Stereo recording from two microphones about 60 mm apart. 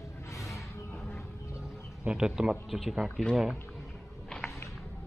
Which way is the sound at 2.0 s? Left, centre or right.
Centre.